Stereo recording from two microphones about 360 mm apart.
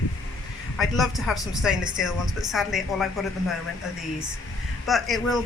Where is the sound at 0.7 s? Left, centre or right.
Centre.